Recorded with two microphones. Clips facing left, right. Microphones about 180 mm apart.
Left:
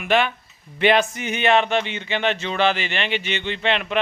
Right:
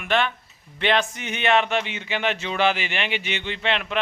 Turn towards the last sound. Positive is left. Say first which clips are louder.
# left 3 dB
turn(degrees=0)  # may be behind; listen again after turning